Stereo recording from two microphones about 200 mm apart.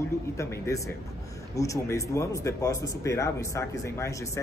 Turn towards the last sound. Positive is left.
turn(degrees=15)  # may be behind; listen again after turning